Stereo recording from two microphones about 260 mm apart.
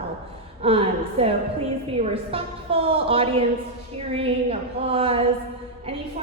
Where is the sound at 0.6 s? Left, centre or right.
Right.